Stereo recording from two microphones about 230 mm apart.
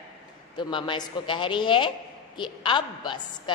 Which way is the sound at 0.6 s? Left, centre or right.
Left.